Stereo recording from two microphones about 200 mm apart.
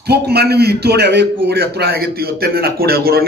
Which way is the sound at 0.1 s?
55° right (ahead or behind).